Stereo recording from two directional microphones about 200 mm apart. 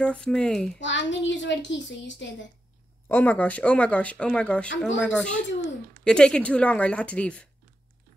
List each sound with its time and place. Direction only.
0.0 s a woman's voice: 5° left (ahead or behind)
0.7 s a child's voice: 65° left (ahead or behind)
3.1 s a woman's voice: 10° left (ahead or behind)